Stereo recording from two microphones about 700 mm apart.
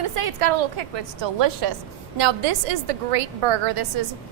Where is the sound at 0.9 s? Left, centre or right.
Right.